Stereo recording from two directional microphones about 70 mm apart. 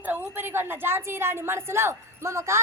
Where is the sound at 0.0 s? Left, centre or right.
Right.